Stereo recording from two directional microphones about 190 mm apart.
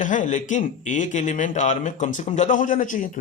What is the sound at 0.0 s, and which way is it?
A man's voice, 40° left (ahead or behind).